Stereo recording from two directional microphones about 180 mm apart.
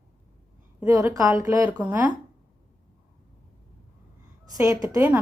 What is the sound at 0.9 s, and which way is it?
Speech, 20° right (ahead or behind).